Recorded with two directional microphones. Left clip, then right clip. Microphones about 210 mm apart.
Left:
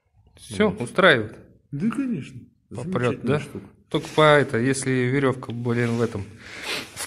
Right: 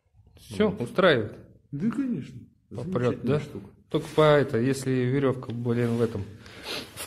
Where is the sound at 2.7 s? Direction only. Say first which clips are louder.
Left 3 dB; centre (ahead or behind).